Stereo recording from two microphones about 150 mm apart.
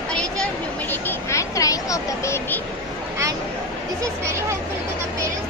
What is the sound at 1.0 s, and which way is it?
Speech, 20° left (ahead or behind).